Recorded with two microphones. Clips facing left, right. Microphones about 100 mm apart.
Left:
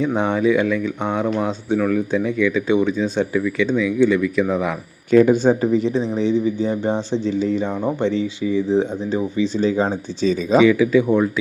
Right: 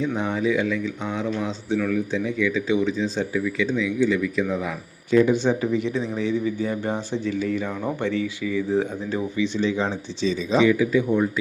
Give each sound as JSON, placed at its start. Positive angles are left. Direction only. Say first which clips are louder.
{"t": 0.0, "sound": "speech", "louder": "left 5 dB", "side_deg": 60}
{"t": 9.4, "sound": "speech", "louder": "left 4 dB", "side_deg": 40}
{"t": 10.7, "sound": "speech", "louder": "left 4 dB", "side_deg": 90}